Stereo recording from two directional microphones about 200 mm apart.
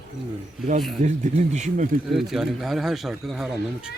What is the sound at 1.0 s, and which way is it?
Speech, 35° right (ahead or behind).